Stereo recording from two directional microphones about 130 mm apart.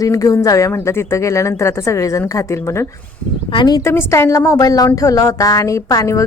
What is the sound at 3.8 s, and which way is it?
A woman's voice, 25° left (ahead or behind).